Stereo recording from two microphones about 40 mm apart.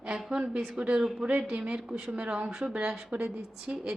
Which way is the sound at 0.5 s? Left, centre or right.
Centre.